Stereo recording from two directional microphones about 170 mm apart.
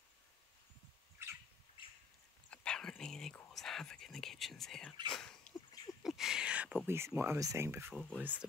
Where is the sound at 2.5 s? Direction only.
5° left (ahead or behind).